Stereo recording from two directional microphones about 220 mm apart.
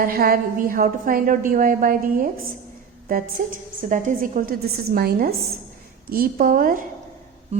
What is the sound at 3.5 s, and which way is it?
A woman's voice, 35° right (ahead or behind).